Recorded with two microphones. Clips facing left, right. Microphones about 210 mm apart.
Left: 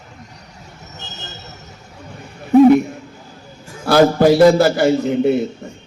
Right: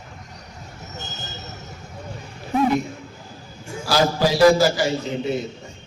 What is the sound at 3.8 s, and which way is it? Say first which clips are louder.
A man's voice: left 8 dB; 60° left (ahead or behind).